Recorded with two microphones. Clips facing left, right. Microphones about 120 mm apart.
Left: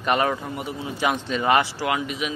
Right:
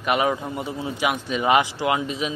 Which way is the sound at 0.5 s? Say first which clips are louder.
Right 2 dB; 30° right (ahead or behind).